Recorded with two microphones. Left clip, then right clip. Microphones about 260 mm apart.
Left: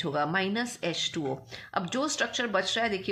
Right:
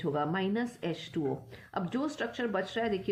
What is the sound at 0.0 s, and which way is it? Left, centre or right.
Speech, centre.